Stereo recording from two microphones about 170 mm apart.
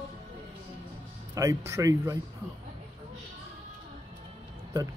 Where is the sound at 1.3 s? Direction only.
20° right (ahead or behind).